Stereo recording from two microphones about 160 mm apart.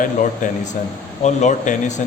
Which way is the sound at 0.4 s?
55° left (ahead or behind).